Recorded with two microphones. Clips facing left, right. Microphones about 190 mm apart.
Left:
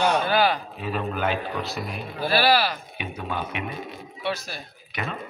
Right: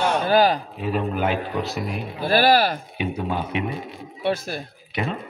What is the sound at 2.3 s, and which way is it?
Speech, 45° right (ahead or behind).